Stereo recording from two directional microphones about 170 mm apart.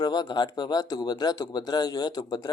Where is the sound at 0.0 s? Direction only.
25° left (ahead or behind).